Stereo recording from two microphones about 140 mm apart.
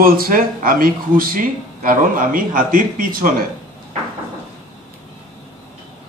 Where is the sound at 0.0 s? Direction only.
90° right.